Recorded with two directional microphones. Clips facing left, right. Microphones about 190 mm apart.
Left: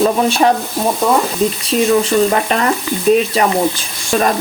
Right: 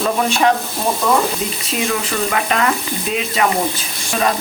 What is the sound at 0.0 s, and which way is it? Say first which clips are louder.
Frying: left 4 dB; 35° left (ahead or behind).